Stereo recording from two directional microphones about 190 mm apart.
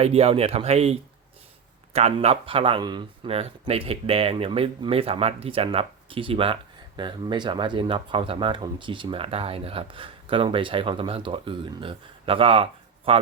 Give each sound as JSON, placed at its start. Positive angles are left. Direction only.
{"t": 0.0, "sound": "speech", "side_deg": -30}